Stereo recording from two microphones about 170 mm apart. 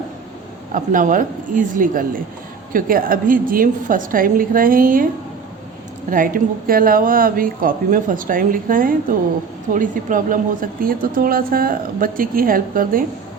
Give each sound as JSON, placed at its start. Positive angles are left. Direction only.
{"t": 0.7, "sound": "a woman's voice", "side_deg": -50}
{"t": 6.1, "sound": "a woman's voice", "side_deg": -55}